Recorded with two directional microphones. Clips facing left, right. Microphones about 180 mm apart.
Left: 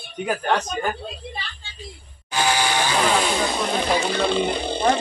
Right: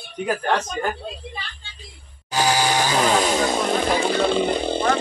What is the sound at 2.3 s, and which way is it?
Speech, 40° right (ahead or behind).